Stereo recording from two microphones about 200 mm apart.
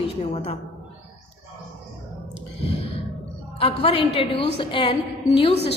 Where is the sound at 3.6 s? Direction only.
30° left (ahead or behind).